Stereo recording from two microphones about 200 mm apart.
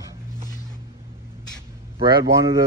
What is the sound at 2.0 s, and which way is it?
Speech, 15° right (ahead or behind).